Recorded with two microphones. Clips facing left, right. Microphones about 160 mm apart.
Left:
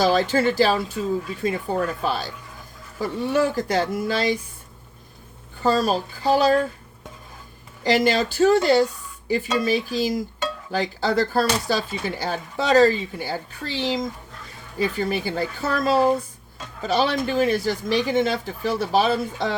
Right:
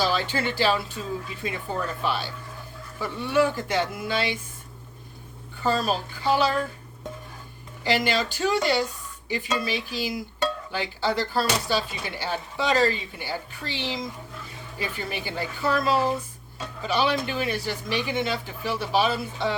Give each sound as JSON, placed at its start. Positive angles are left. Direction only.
{"t": 0.0, "sound": "speech", "side_deg": 45}
{"t": 2.0, "sound": "speech", "side_deg": 40}
{"t": 5.6, "sound": "speech", "side_deg": 40}
{"t": 7.9, "sound": "speech", "side_deg": 40}